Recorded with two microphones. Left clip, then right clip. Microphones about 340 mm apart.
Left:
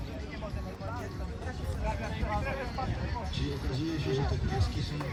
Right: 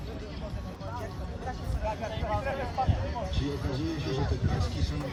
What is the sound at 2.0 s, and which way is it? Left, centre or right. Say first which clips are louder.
Vehicle: right 3 dB; right.